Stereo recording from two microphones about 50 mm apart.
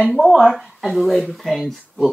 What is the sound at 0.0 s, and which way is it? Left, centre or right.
Speech, centre.